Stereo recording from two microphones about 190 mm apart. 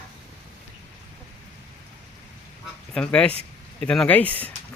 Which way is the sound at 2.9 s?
5° left (ahead or behind).